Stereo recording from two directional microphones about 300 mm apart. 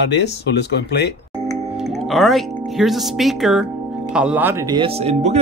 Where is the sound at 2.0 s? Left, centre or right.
Centre.